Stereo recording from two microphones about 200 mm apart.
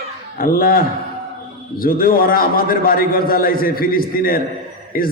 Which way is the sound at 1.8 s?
45° left (ahead or behind).